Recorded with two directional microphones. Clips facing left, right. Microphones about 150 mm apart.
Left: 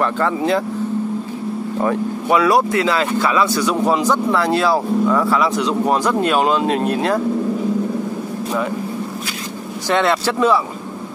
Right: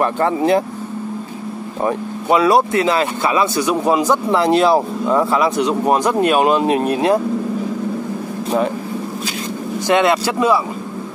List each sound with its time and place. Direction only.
0.0 s speech: 20° right (ahead or behind)
1.8 s speech: 20° right (ahead or behind)
9.8 s speech: 15° right (ahead or behind)